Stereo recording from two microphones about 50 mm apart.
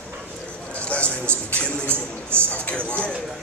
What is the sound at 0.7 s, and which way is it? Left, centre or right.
A man's voice, left.